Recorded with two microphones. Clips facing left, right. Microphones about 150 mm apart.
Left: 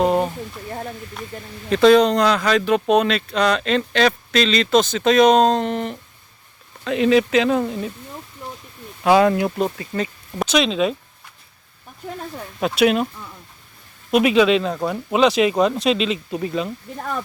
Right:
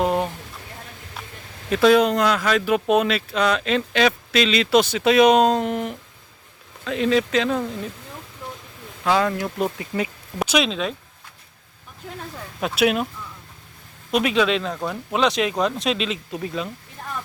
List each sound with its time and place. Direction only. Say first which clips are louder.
0.0 s speech: left 3 dB; centre (ahead or behind)
1.7 s speech: left 3 dB; 5° right (ahead or behind)
6.8 s speech: left 4 dB; 5° left (ahead or behind)
9.0 s speech: left 6 dB; 20° left (ahead or behind)
9.7 s speech: left 1 dB; 10° right (ahead or behind)
12.5 s speech: left 3 dB; centre (ahead or behind)
14.1 s speech: left 5 dB; 5° left (ahead or behind)